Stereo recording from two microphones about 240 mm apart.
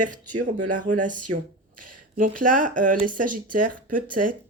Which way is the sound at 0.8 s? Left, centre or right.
Right.